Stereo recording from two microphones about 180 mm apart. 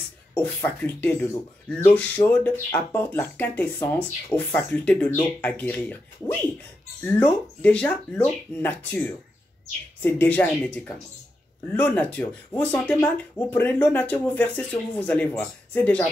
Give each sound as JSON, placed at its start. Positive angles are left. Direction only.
{"t": 0.3, "sound": "speech", "side_deg": 10}
{"t": 7.2, "sound": "speech", "side_deg": 5}